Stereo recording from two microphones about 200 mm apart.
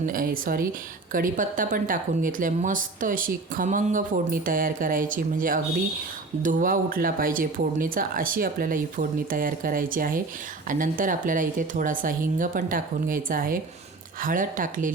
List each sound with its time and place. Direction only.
0.0 s a woman's voice: 45° right (ahead or behind)